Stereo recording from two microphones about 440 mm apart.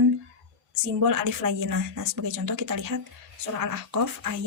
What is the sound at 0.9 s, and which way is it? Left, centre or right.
Speech, right.